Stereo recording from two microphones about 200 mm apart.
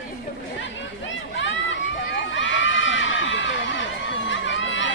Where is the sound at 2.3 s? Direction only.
70° left (ahead or behind).